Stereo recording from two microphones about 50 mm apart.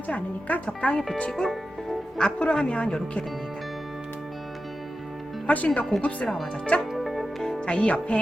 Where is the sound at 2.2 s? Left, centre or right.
Left.